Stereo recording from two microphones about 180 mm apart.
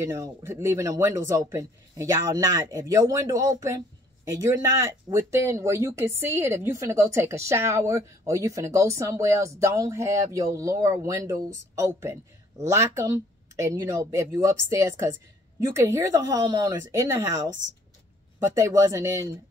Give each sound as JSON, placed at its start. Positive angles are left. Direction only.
{"t": 0.0, "sound": "speech", "side_deg": -15}
{"t": 18.4, "sound": "speech", "side_deg": -15}